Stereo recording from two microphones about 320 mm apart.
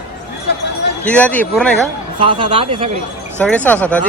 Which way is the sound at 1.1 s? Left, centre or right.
Centre.